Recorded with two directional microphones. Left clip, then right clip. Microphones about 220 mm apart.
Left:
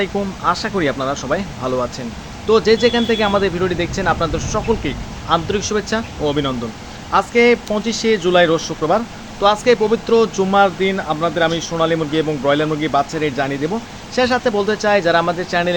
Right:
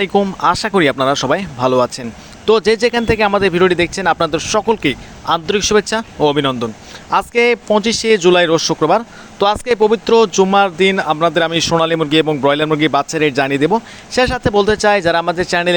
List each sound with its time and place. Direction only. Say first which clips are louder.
0.0 s speech: right 5 dB; 45° right (ahead or behind)